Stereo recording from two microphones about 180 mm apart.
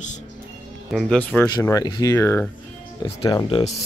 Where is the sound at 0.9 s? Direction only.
5° left (ahead or behind).